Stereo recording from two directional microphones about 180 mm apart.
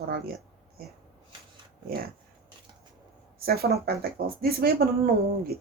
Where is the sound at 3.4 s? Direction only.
60° right (ahead or behind).